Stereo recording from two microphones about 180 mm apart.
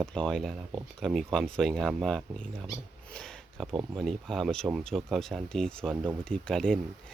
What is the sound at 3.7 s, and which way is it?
Speech, 25° right (ahead or behind).